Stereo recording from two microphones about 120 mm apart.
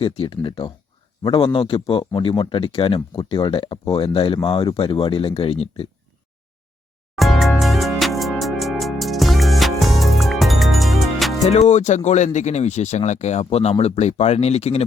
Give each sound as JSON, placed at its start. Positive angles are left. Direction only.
{"t": 0.0, "sound": "speech", "side_deg": 45}
{"t": 7.2, "sound": "music", "side_deg": 0}
{"t": 11.7, "sound": "speech", "side_deg": 80}